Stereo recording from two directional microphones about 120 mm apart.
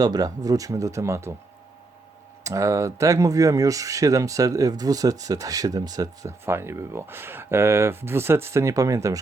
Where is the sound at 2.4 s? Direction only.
25° right (ahead or behind).